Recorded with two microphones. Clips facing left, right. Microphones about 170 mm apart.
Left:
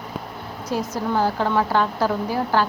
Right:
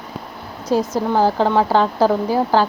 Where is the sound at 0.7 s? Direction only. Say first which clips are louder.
Right 6 dB; 30° right (ahead or behind).